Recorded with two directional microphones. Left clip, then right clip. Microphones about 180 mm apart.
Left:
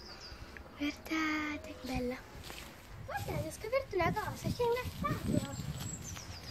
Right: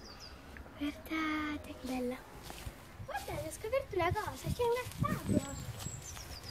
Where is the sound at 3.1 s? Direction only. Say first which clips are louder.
Left 1 dB; 20° right (ahead or behind).